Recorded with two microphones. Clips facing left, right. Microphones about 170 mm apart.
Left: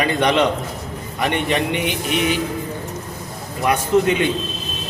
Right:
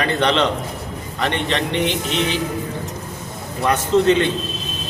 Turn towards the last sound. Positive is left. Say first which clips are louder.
# right 2 dB
turn(degrees=10)  # may be behind; listen again after turning